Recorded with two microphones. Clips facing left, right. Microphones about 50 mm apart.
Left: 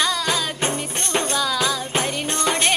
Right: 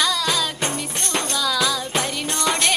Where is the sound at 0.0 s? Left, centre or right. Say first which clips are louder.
Even; left.